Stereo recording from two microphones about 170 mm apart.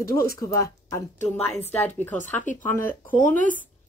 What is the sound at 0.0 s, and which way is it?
Speech, 15° left (ahead or behind).